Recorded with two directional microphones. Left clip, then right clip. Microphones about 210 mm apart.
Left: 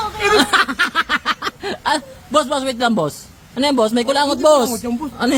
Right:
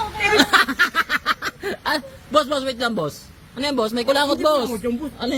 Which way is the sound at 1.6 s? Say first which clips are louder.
Left 4 dB; 5° left (ahead or behind).